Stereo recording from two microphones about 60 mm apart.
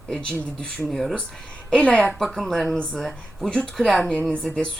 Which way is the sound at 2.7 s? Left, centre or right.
Centre.